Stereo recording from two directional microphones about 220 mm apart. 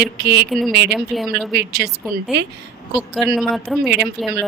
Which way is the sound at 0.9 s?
Centre (ahead or behind).